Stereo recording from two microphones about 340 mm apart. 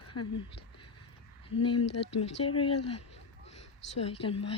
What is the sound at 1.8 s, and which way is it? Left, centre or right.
Speech, left.